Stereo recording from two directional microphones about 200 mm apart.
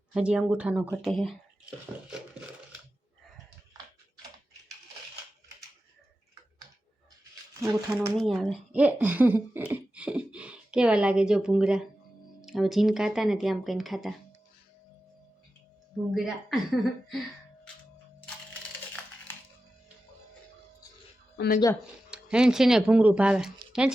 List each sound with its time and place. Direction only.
0.1 s speech: 5° right (ahead or behind)
7.6 s speech: 15° right (ahead or behind)
8.1 s speech: centre (ahead or behind)
16.1 s speech: centre (ahead or behind)
21.3 s speech: 50° left (ahead or behind)
22.1 s speech: 5° right (ahead or behind)